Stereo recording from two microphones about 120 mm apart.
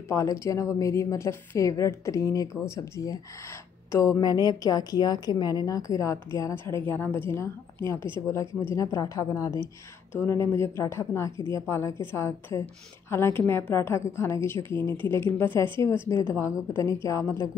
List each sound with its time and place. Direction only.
0.1 s a woman's voice: 25° left (ahead or behind)